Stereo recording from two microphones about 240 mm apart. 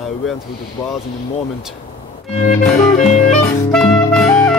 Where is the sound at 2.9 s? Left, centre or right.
Left.